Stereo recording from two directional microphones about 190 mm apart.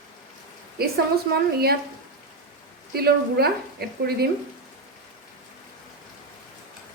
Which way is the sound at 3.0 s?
55° right (ahead or behind).